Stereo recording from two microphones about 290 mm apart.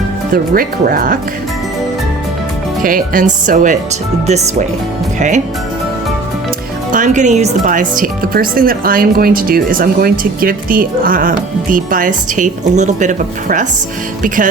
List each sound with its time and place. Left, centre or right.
0.5 s speech: right
2.8 s speech: right
6.9 s speech: right